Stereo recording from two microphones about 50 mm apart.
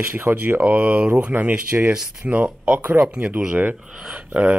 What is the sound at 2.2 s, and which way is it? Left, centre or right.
Speech, right.